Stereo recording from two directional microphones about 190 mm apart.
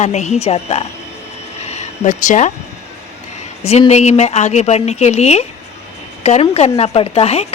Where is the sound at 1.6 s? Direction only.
35° left (ahead or behind).